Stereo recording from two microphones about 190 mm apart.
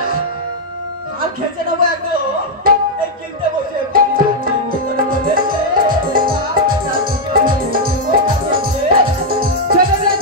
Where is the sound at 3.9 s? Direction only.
50° right (ahead or behind).